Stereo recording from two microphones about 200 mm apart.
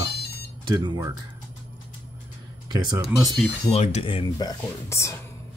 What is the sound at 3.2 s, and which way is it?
Speech, centre (ahead or behind).